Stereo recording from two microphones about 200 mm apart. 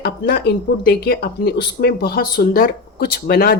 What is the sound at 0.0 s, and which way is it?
Speech, 55° left (ahead or behind).